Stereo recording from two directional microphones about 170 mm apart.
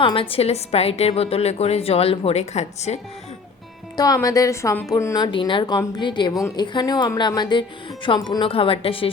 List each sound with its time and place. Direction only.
0.0 s a woman's voice: 30° left (ahead or behind)
3.9 s a woman's voice: 20° left (ahead or behind)